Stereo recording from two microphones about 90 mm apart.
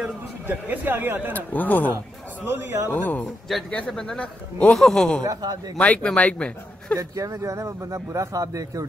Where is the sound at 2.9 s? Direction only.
20° left (ahead or behind).